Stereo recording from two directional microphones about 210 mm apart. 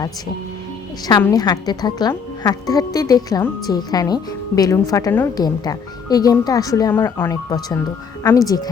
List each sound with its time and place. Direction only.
1.0 s a woman's voice: 15° left (ahead or behind)